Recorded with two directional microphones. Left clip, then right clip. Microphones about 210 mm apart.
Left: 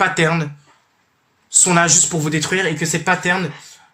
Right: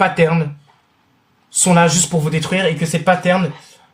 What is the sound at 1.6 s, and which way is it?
Speech, 30° left (ahead or behind).